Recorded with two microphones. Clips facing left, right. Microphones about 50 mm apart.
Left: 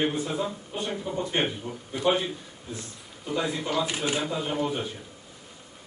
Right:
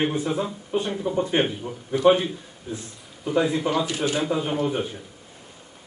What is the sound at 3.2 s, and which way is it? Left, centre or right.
A man's voice, right.